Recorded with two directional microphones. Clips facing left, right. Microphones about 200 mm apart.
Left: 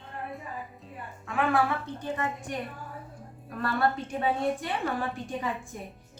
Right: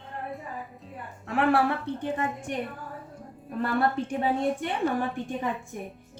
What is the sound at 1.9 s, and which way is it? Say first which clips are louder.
Speech: right 6 dB; 60° right (ahead or behind).